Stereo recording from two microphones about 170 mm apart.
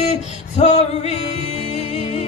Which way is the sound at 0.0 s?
40° left (ahead or behind).